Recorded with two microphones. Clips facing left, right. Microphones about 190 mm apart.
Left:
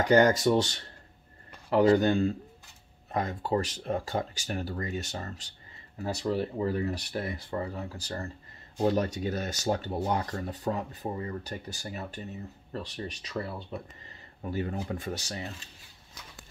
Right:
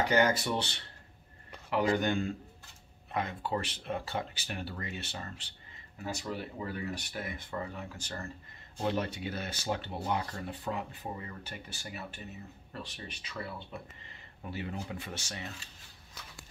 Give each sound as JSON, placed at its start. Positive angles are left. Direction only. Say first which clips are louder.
{"t": 0.0, "sound": "speech", "louder": "left 6 dB", "side_deg": 45}